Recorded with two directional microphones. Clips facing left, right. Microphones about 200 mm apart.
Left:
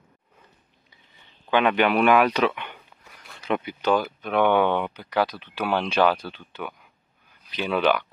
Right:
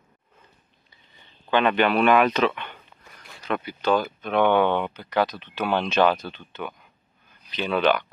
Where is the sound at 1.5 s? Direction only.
10° left (ahead or behind).